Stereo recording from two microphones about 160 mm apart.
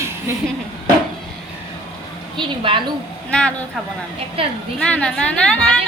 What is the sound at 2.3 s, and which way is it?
Speech, 30° right (ahead or behind).